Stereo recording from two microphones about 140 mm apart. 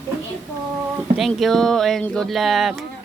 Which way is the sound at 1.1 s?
Centre (ahead or behind).